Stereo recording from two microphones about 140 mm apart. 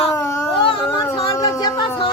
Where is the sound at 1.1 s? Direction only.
25° left (ahead or behind).